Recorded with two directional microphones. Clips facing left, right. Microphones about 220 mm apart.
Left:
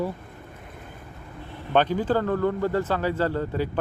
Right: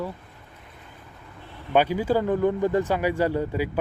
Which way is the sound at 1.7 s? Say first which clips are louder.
Right 1 dB; 10° right (ahead or behind).